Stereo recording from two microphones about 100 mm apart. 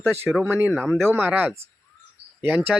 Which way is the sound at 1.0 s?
20° right (ahead or behind).